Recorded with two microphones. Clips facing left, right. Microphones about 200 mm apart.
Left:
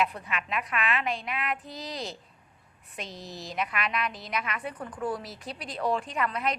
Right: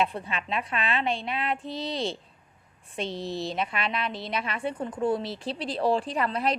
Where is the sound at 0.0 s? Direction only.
30° right (ahead or behind).